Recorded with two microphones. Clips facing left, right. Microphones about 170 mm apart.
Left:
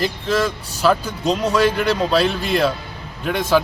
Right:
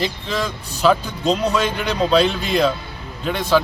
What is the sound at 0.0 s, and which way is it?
Speech, centre (ahead or behind).